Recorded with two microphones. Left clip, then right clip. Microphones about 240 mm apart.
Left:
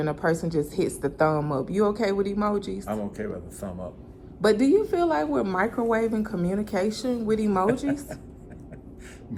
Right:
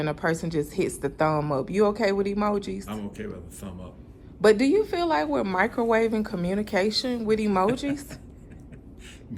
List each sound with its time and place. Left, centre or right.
0.0 s a woman's voice: right
3.2 s a man's voice: centre
4.4 s a woman's voice: right